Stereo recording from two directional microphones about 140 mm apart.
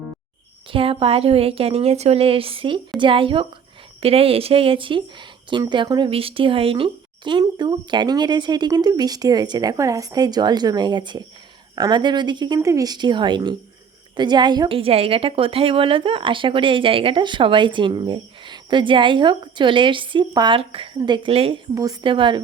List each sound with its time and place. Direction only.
0.7 s a woman's voice: 40° right (ahead or behind)
21.8 s a woman's voice: 30° right (ahead or behind)